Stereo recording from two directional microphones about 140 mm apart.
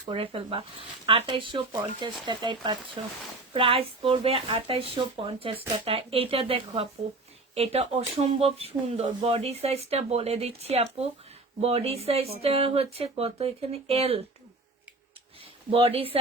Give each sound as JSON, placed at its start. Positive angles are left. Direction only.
{"t": 0.0, "sound": "speech", "side_deg": -40}
{"t": 15.7, "sound": "speech", "side_deg": -40}